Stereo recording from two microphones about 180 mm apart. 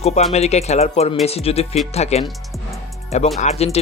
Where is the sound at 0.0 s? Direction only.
35° left (ahead or behind).